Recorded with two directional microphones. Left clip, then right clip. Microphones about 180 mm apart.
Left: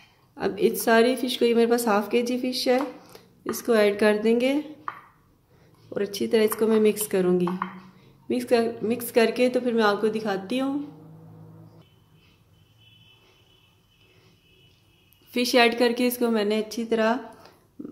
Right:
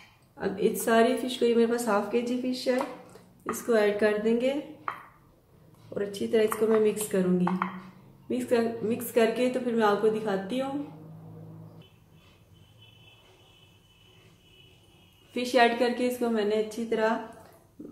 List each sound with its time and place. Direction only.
0.4 s speech: 55° left (ahead or behind)
3.4 s speech: 55° left (ahead or behind)
5.9 s a woman's voice: 60° left (ahead or behind)
15.3 s speech: 65° left (ahead or behind)